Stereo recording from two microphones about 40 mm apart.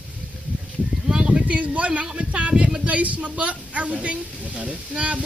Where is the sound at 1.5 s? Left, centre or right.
Right.